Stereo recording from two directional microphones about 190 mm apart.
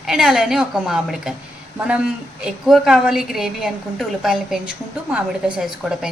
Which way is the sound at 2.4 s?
Centre (ahead or behind).